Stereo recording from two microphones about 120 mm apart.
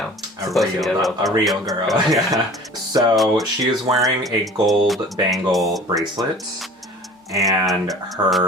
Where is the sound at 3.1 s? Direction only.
Centre (ahead or behind).